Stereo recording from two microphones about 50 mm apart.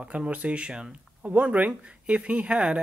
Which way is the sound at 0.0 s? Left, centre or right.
Centre.